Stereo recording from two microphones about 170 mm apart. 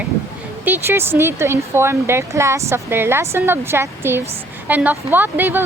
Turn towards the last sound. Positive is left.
turn(degrees=-10)  # may be behind; listen again after turning